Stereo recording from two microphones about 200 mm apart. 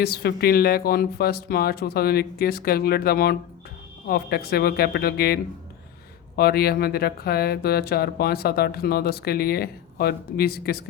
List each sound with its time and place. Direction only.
0.0 s speech: 50° left (ahead or behind)